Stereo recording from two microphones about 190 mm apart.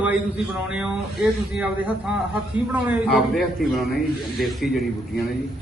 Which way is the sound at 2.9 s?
Centre (ahead or behind).